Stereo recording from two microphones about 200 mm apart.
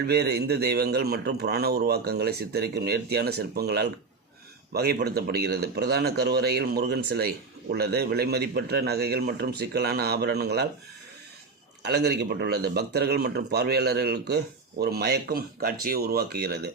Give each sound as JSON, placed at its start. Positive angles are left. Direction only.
{"t": 0.1, "sound": "speech", "side_deg": -55}
{"t": 11.8, "sound": "speech", "side_deg": -55}